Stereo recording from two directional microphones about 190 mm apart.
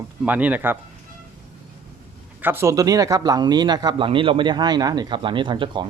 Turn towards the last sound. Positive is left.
turn(degrees=-25)  # may be behind; listen again after turning